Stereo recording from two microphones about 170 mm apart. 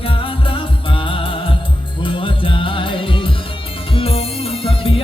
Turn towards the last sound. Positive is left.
turn(degrees=30)  # may be behind; listen again after turning